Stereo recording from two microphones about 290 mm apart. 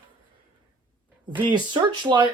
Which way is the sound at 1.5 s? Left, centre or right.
Centre.